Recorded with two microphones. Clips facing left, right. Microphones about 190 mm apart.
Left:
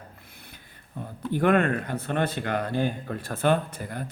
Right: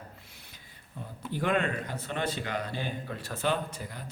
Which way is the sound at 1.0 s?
55° left (ahead or behind).